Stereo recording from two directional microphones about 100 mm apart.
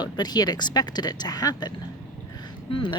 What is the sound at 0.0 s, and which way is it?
Speech, 45° left (ahead or behind).